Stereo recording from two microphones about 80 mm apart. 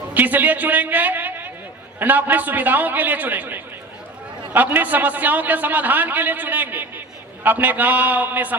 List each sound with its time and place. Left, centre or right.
0.1 s a man's voice: right